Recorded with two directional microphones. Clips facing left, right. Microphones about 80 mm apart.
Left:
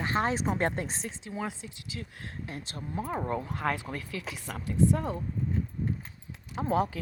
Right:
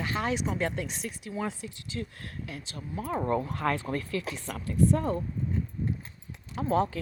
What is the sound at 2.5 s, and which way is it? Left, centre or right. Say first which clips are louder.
Speech: left 1 dB; left.